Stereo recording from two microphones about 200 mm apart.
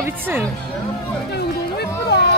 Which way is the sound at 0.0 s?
10° right (ahead or behind).